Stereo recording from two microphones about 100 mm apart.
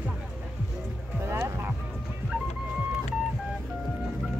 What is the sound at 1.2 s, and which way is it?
Music, 25° right (ahead or behind).